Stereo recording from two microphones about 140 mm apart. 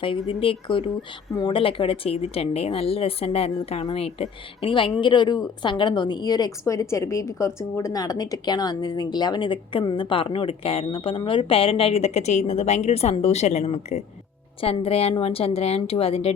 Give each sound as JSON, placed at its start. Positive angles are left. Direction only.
{"t": 0.0, "sound": "speech", "side_deg": 40}
{"t": 14.6, "sound": "a woman's voice", "side_deg": 45}